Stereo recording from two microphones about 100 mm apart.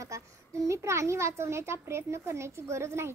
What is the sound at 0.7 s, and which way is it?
A child's voice, 30° right (ahead or behind).